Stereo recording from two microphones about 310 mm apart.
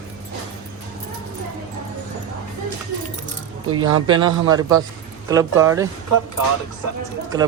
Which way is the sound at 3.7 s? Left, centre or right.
Right.